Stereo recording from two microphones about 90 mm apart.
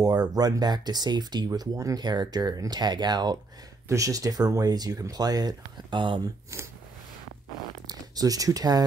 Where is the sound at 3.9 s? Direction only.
40° right (ahead or behind); by 6.2 s 65° right (ahead or behind).